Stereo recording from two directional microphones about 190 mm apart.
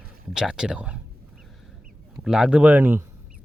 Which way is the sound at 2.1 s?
5° right (ahead or behind).